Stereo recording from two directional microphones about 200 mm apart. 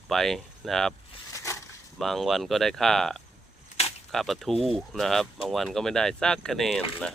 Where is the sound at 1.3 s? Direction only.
15° left (ahead or behind).